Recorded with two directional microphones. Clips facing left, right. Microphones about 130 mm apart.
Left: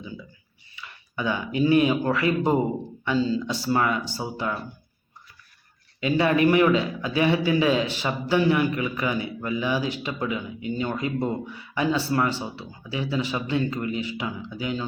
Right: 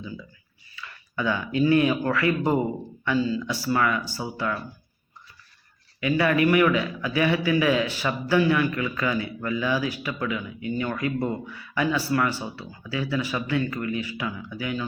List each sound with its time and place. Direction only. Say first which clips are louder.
0.8 s a man's voice: right 1 dB; 20° left (ahead or behind)
6.0 s a man's voice: left 1 dB; 25° left (ahead or behind)